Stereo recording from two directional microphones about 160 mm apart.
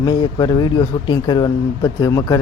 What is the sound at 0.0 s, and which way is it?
Speech, 25° left (ahead or behind).